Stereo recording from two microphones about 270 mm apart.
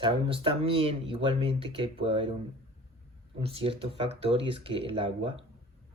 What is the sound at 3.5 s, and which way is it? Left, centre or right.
Speech, right.